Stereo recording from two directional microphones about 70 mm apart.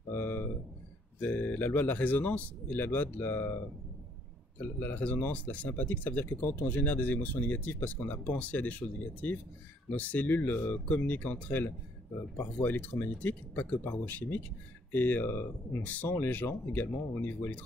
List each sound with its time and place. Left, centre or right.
0.1 s a sound: left
1.2 s speech: left
4.6 s speech: left
15.8 s speech: left